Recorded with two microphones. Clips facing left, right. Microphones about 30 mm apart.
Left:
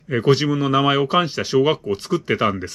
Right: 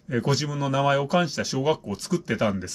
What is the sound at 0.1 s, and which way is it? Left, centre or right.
Speech, left.